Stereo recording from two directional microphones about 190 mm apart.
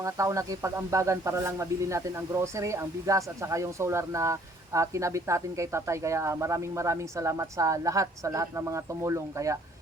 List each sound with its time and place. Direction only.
0.0 s speech: 15° right (ahead or behind)